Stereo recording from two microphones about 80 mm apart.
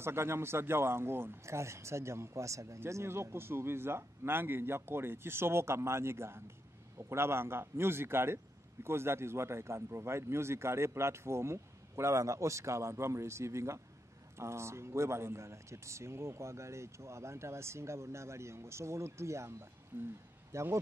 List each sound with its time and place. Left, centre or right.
0.0 s a man's voice: right
19.9 s speech: right
20.5 s a man's voice: right